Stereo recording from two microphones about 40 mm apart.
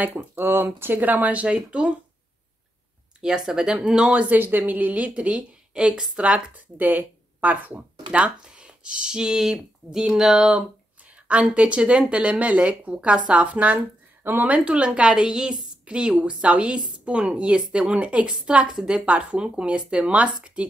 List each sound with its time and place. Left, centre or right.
0.0 s speech: right
3.2 s a woman's voice: centre
4.3 s a woman's voice: right
6.5 s speech: right
8.2 s speech: right
10.1 s speech: centre
11.2 s a woman's voice: right
14.2 s speech: right
14.5 s a woman's voice: right